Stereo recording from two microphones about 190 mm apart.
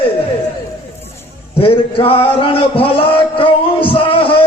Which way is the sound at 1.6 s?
30° left (ahead or behind).